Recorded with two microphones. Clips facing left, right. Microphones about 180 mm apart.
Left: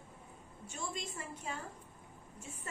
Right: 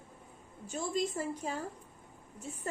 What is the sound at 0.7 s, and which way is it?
A woman's voice, 35° right (ahead or behind).